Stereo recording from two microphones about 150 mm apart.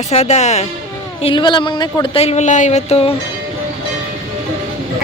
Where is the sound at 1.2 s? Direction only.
35° left (ahead or behind).